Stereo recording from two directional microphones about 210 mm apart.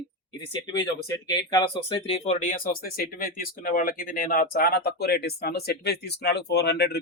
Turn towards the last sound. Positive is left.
turn(degrees=50)  # may be behind; listen again after turning